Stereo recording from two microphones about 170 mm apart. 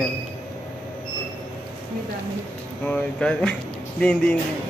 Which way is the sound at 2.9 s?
5° left (ahead or behind).